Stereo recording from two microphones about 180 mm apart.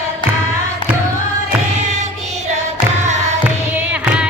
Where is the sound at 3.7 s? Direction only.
10° right (ahead or behind).